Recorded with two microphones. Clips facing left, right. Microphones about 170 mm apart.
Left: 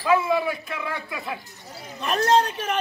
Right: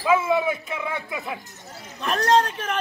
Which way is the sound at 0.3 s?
20° right (ahead or behind).